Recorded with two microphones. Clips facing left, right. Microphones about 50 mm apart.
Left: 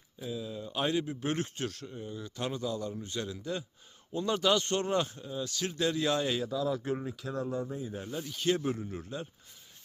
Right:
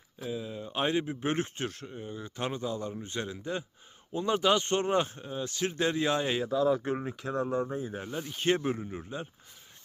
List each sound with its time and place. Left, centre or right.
0.3 s speech: right
6.8 s speech: right